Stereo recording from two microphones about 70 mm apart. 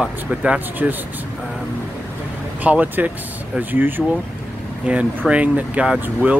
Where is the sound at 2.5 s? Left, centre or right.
Right.